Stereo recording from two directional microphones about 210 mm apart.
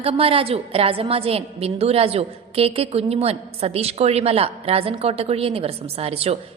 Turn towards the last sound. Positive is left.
turn(degrees=-30)  # may be behind; listen again after turning